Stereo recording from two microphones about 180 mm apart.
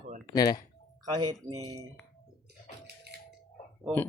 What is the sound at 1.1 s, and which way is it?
Speech, 20° right (ahead or behind).